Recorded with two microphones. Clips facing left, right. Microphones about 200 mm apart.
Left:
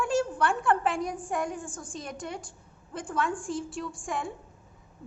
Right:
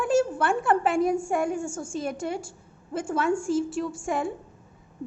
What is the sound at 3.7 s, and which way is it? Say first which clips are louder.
Speech: right 7 dB; 25° right (ahead or behind).